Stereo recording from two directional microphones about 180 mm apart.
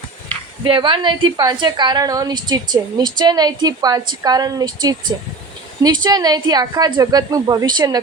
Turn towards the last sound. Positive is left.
turn(degrees=-20)  # may be behind; listen again after turning